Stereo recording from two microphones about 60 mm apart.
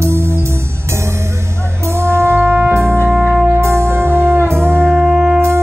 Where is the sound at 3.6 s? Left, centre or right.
Right.